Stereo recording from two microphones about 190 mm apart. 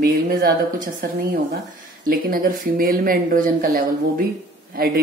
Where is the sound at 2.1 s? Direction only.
50° right (ahead or behind).